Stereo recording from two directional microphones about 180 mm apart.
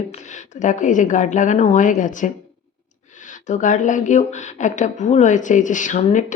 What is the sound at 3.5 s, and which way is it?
A woman's voice, 45° left (ahead or behind).